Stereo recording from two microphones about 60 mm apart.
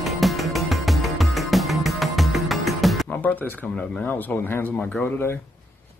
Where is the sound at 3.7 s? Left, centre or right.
Centre.